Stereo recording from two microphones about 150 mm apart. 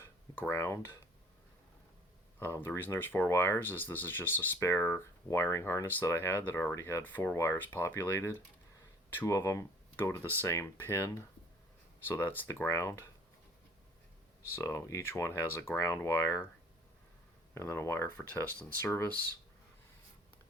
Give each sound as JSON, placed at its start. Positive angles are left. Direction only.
{"t": 0.0, "sound": "speech", "side_deg": 15}
{"t": 2.4, "sound": "speech", "side_deg": 15}
{"t": 14.5, "sound": "speech", "side_deg": 20}
{"t": 17.5, "sound": "speech", "side_deg": 20}